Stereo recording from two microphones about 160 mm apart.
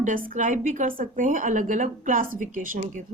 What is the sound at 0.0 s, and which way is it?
A woman's voice, 55° right (ahead or behind).